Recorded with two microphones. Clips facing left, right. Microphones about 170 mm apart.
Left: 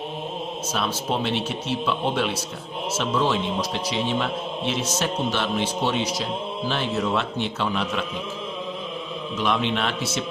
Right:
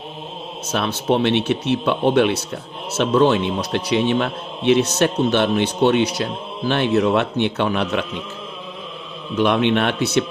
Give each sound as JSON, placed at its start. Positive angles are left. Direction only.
{"t": 0.7, "sound": "a man's voice", "side_deg": -65}
{"t": 9.3, "sound": "a man's voice", "side_deg": -65}